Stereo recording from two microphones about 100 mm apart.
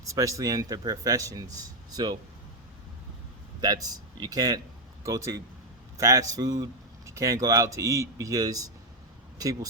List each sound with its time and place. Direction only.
0.0 s speech: 35° right (ahead or behind)
3.6 s speech: 40° right (ahead or behind)